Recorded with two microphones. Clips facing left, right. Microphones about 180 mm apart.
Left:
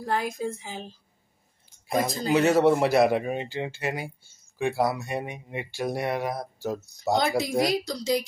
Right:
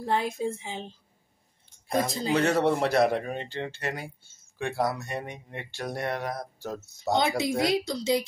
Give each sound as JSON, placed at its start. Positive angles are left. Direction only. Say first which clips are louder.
{"t": 0.0, "sound": "speech", "louder": "right 1 dB", "side_deg": -25}
{"t": 1.9, "sound": "speech", "louder": "left 2 dB", "side_deg": 5}
{"t": 7.2, "sound": "speech", "louder": "left 1 dB", "side_deg": -25}